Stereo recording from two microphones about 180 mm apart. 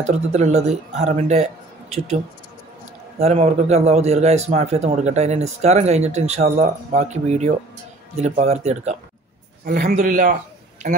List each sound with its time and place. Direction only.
0.1 s speech: 40° right (ahead or behind)
3.2 s a man's voice: 35° right (ahead or behind)